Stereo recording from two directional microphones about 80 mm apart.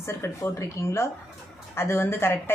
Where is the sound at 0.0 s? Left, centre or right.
Left.